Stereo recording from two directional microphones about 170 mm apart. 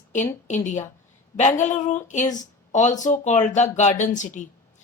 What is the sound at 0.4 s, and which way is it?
Speech, 45° left (ahead or behind).